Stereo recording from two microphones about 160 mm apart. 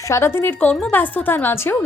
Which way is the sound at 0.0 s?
15° left (ahead or behind).